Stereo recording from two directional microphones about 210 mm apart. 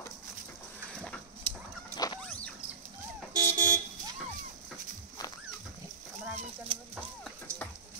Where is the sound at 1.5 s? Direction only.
25° right (ahead or behind).